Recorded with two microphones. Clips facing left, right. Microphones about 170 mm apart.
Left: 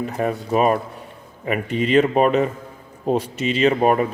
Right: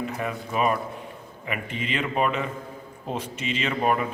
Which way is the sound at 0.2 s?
40° left (ahead or behind).